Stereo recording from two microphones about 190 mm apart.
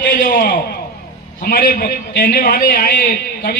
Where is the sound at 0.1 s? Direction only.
45° left (ahead or behind).